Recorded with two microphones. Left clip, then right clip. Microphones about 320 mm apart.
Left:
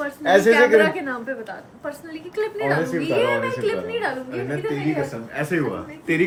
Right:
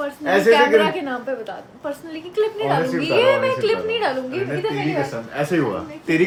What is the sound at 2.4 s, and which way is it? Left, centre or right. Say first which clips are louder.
A woman's voice: right 3 dB; centre.